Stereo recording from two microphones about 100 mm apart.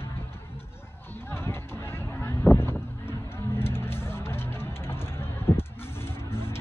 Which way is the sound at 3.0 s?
25° left (ahead or behind).